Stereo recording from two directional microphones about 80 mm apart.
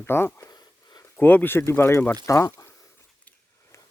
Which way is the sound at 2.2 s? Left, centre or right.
Left.